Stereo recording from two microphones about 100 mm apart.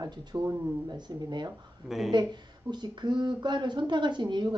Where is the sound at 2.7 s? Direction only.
50° right (ahead or behind).